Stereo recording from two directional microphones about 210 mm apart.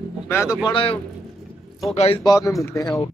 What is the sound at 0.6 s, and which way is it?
A man's voice, 25° left (ahead or behind).